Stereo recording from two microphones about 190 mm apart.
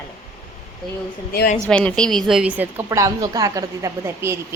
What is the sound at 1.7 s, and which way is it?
A woman's voice, 5° left (ahead or behind).